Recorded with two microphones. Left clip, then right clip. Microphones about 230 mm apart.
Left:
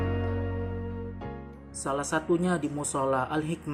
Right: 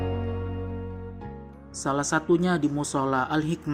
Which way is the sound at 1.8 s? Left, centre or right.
Centre.